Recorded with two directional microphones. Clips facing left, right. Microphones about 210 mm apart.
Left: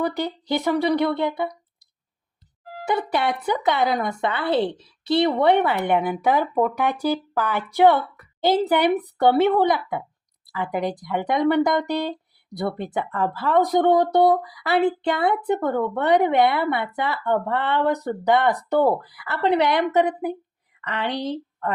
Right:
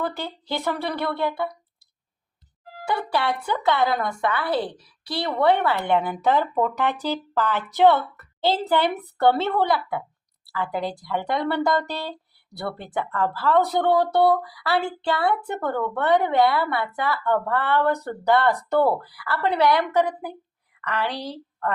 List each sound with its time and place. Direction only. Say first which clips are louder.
0.0 s speech: left 4 dB; 15° left (ahead or behind)
2.8 s a woman's voice: left 2 dB; 20° left (ahead or behind)